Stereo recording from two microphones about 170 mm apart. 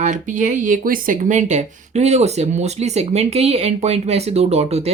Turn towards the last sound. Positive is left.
turn(degrees=-40)  # may be behind; listen again after turning